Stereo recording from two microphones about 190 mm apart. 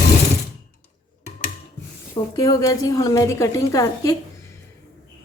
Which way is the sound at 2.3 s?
20° left (ahead or behind).